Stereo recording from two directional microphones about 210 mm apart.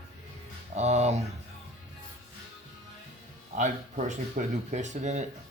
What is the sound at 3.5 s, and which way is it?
Speech, 35° right (ahead or behind).